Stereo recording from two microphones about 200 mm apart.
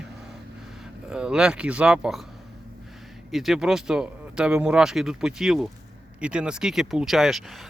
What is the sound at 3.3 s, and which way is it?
Speech, centre (ahead or behind).